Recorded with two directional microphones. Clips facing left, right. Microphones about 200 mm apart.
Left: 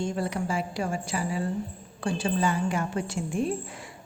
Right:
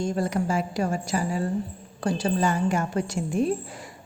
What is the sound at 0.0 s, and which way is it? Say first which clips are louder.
A woman's voice: right 3 dB; 45° right (ahead or behind).